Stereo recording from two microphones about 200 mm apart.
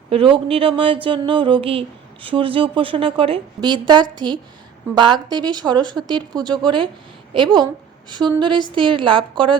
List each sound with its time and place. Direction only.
0.1 s a woman's voice: 25° right (ahead or behind)